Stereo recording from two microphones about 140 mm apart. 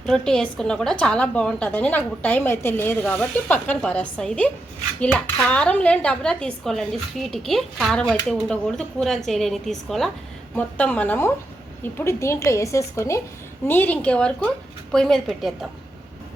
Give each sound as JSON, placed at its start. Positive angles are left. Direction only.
{"t": 0.0, "sound": "a woman's voice", "side_deg": 5}